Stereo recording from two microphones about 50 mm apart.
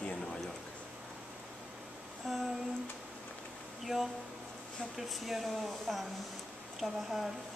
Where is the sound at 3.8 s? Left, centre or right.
Centre.